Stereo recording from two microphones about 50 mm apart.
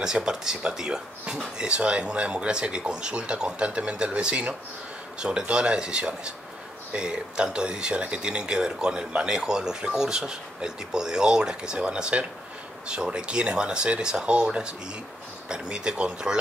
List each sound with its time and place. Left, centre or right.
0.0 s speech: centre